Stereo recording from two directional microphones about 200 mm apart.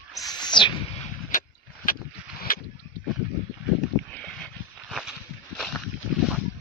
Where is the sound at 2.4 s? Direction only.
50° left (ahead or behind).